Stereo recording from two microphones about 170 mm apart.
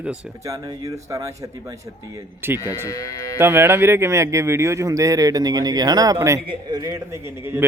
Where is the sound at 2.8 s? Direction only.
20° left (ahead or behind).